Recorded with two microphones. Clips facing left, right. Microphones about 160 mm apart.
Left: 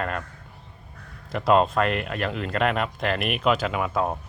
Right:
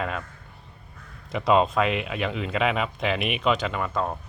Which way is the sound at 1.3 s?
Centre (ahead or behind).